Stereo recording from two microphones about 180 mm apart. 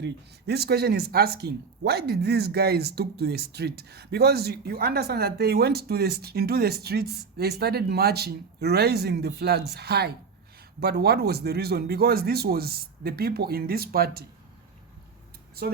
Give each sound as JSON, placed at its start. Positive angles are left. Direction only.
{"t": 0.0, "sound": "speech", "side_deg": -65}